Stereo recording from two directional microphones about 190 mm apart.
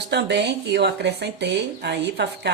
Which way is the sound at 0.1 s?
65° right (ahead or behind).